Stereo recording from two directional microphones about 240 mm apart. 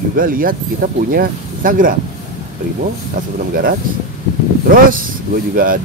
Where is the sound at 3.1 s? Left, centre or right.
Right.